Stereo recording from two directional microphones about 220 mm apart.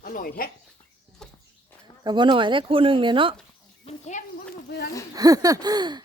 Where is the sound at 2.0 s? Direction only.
20° right (ahead or behind).